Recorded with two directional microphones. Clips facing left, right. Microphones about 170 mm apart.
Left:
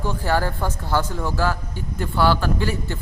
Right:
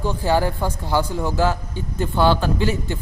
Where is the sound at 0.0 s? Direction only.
15° right (ahead or behind).